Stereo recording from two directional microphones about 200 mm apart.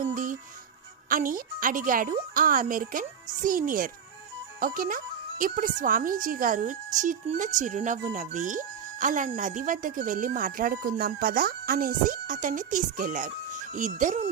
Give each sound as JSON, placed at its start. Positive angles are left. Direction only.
{"t": 0.0, "sound": "music", "side_deg": -40}
{"t": 1.0, "sound": "a child's voice", "side_deg": -45}